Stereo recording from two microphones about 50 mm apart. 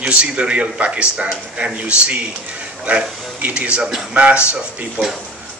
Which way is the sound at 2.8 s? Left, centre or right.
Right.